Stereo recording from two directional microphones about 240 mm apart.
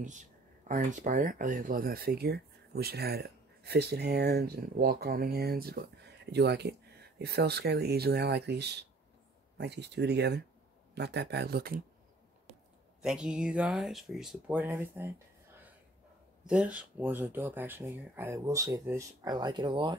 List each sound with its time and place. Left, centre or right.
0.0 s speech: right
13.0 s speech: centre
16.4 s speech: centre